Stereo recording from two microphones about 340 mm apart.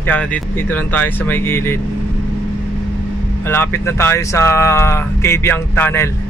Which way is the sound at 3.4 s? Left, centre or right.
Centre.